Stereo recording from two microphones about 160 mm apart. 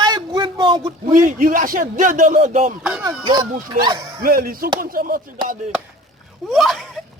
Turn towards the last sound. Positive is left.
turn(degrees=0)  # may be behind; listen again after turning